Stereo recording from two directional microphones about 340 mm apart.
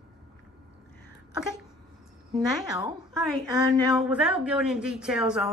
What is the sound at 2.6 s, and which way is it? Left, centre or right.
Speech, centre.